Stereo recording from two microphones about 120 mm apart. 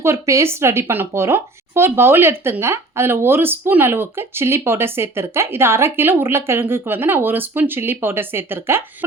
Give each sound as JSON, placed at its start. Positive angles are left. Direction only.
{"t": 0.0, "sound": "speech", "side_deg": -25}